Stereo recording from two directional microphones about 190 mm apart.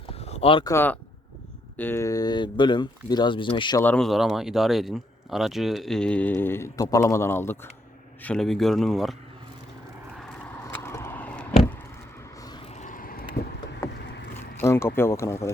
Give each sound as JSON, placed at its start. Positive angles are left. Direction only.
{"t": 0.1, "sound": "a sound", "side_deg": 35}
{"t": 0.7, "sound": "speech", "side_deg": 10}
{"t": 3.8, "sound": "speech", "side_deg": 5}
{"t": 10.8, "sound": "a sound", "side_deg": 15}
{"t": 12.7, "sound": "vehicle", "side_deg": 40}
{"t": 14.6, "sound": "speech", "side_deg": 10}